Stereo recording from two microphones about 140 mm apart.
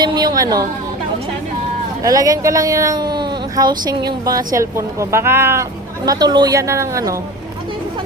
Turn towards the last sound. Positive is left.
turn(degrees=-25)  # may be behind; listen again after turning